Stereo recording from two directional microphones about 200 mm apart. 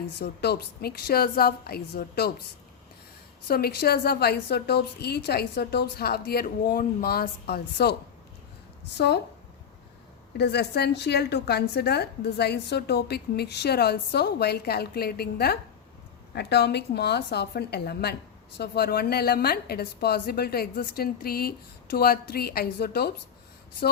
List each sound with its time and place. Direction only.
0.2 s a woman's voice: 55° left (ahead or behind)
3.4 s a woman's voice: 50° left (ahead or behind)
9.0 s a woman's voice: 55° left (ahead or behind)
10.3 s a woman's voice: 55° left (ahead or behind)